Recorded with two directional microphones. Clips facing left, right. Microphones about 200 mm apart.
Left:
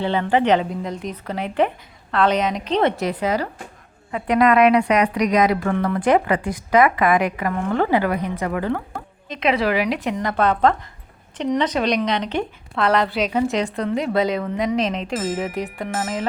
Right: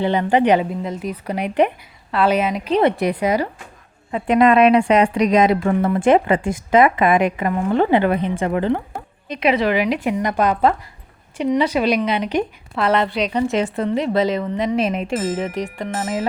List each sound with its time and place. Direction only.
0.0 s speech: 15° right (ahead or behind)
1.3 s speech: 15° right (ahead or behind)
4.1 s speech: 25° right (ahead or behind)
9.3 s a woman's voice: 5° right (ahead or behind)